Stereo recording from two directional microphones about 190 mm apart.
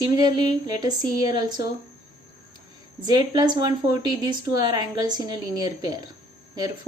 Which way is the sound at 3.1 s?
20° right (ahead or behind).